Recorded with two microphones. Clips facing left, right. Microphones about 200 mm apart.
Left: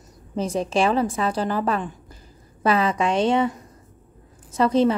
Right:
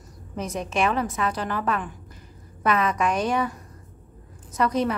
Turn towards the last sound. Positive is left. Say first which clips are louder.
# left 5 dB
turn(degrees=30)  # may be behind; listen again after turning